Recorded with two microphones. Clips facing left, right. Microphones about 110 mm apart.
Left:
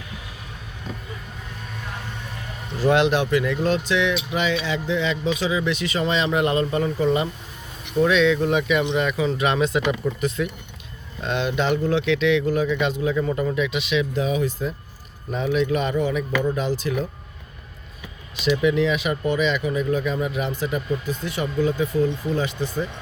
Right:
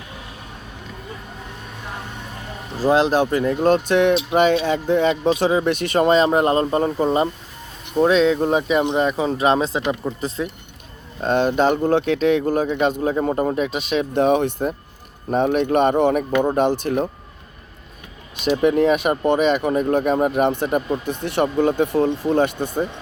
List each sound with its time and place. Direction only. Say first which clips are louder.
2.7 s speech: right 2 dB; 35° right (ahead or behind)
11.2 s speech: right 6 dB; 45° right (ahead or behind)
18.3 s speech: right 3 dB; 50° right (ahead or behind)